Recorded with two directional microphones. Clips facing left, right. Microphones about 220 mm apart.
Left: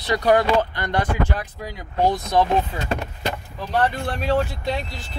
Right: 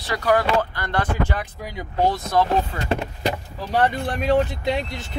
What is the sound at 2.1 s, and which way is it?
Speech, 15° left (ahead or behind).